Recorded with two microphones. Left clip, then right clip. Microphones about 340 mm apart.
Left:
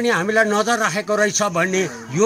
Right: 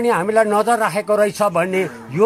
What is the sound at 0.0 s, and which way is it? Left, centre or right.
Speech, centre.